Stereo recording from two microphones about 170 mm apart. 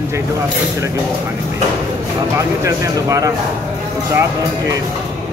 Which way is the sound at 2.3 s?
20° right (ahead or behind).